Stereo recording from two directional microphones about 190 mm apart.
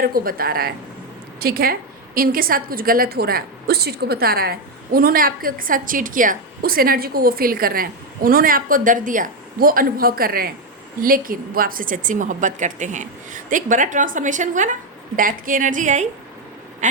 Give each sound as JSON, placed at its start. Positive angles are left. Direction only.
{"t": 0.0, "sound": "a woman's voice", "side_deg": -50}
{"t": 16.8, "sound": "quack", "side_deg": -40}